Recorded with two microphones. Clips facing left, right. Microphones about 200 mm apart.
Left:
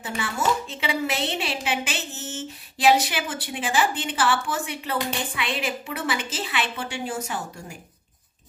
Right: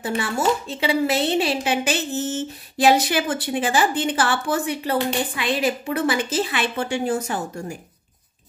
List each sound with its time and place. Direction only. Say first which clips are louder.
0.0 s a woman's voice: right 5 dB; 35° right (ahead or behind)